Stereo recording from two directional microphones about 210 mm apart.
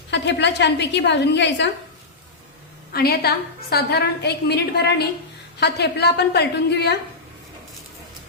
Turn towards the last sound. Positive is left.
turn(degrees=50)  # may be behind; listen again after turning